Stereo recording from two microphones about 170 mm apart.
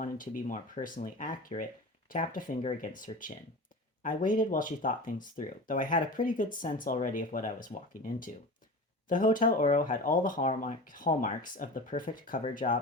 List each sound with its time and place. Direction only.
0.0 s speech: 50° left (ahead or behind)
2.6 s speech: 35° left (ahead or behind)
2.9 s speech: 55° left (ahead or behind)